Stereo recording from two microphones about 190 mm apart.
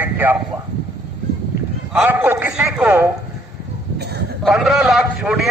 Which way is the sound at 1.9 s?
10° right (ahead or behind).